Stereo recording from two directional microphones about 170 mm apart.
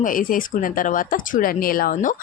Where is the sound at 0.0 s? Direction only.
55° left (ahead or behind).